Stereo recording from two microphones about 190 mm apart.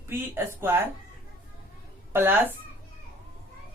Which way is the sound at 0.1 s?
10° right (ahead or behind).